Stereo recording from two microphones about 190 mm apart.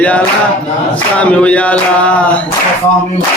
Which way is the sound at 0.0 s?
5° left (ahead or behind).